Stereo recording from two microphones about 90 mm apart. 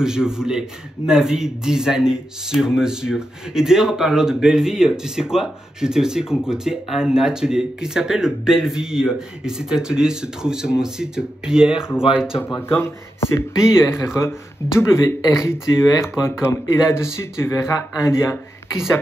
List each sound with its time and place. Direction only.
0.0 s a man's voice: 5° right (ahead or behind)
12.4 s speech: 30° left (ahead or behind)